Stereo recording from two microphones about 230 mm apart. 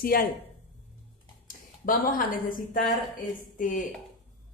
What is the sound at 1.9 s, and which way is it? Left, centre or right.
A woman's voice, left.